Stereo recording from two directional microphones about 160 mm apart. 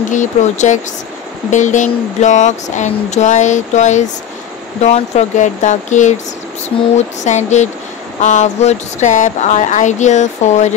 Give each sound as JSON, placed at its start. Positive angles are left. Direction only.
{"t": 0.1, "sound": "speech", "side_deg": 50}
{"t": 7.2, "sound": "speech", "side_deg": 45}